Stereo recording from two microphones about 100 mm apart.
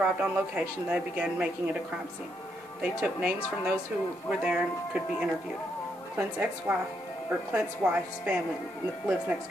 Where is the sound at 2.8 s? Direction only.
10° right (ahead or behind).